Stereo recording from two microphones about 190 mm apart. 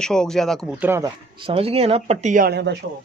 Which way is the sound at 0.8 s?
15° right (ahead or behind).